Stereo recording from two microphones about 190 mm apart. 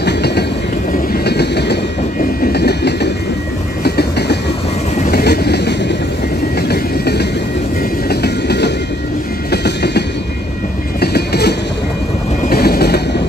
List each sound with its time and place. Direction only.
0.0 s train: 60° left (ahead or behind)